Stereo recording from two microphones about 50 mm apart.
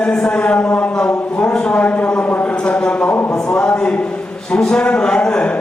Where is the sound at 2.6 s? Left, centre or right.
Left.